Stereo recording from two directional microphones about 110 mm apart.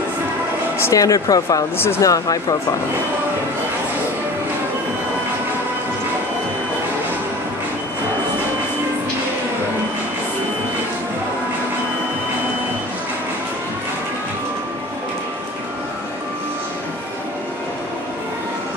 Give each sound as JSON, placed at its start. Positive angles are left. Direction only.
{"t": 0.7, "sound": "speech", "side_deg": 30}